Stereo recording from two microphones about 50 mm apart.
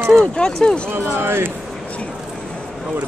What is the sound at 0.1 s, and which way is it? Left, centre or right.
Speech, centre.